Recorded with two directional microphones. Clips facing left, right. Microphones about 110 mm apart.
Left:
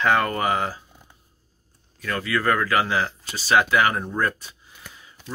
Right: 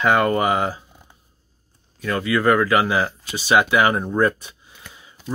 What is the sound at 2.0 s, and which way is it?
Speech, 20° right (ahead or behind).